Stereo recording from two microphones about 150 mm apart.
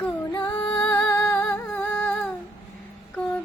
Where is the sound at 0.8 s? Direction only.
15° left (ahead or behind).